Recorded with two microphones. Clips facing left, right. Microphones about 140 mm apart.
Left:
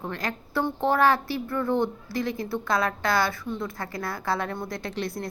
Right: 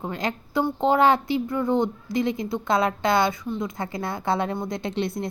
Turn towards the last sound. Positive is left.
turn(degrees=-20)  # may be behind; listen again after turning